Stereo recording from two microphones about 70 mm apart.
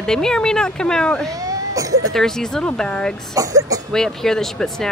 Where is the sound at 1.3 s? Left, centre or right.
Right.